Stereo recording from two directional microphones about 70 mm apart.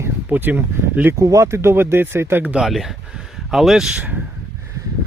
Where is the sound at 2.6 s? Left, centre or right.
Centre.